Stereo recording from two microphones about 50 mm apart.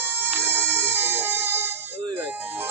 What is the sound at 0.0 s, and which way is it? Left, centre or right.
Music, right.